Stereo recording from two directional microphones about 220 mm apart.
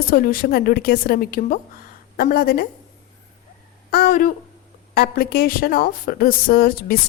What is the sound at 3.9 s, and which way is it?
A woman's voice, 45° left (ahead or behind).